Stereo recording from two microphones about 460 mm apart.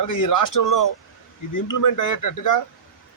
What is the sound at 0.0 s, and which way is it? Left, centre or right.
A man's voice, left.